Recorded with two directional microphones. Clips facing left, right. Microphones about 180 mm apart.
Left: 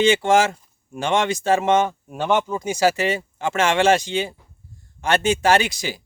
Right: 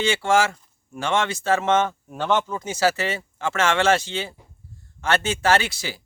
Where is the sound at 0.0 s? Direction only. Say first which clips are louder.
Left 4 dB; 20° left (ahead or behind).